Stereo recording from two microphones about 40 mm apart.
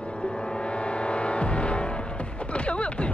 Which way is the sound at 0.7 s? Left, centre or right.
Left.